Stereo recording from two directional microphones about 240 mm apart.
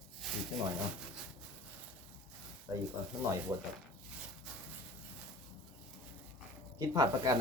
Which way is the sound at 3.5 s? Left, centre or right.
Centre.